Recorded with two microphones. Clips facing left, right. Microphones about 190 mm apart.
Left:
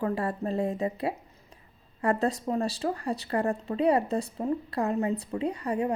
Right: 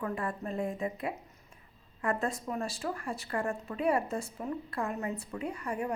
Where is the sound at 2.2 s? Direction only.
35° left (ahead or behind).